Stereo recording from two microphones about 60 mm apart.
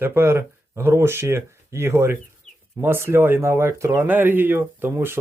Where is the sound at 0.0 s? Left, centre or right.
Right.